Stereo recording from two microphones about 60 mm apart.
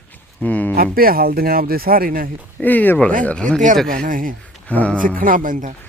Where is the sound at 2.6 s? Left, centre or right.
Left.